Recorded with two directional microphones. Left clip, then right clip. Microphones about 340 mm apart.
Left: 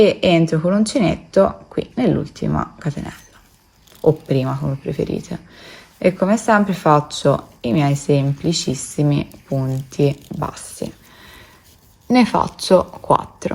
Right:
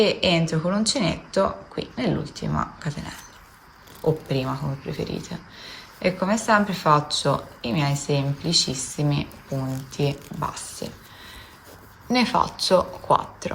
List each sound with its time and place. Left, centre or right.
0.0 s speech: centre
4.3 s speech: centre
9.5 s speech: left
9.9 s speech: centre
12.0 s speech: centre